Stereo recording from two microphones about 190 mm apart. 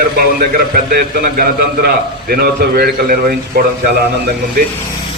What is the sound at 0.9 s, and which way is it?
A man's voice, 50° right (ahead or behind).